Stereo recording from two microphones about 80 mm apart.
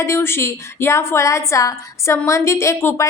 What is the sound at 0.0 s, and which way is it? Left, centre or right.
A woman's voice, left.